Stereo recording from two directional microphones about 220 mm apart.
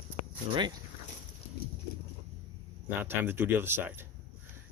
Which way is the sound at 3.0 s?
10° right (ahead or behind).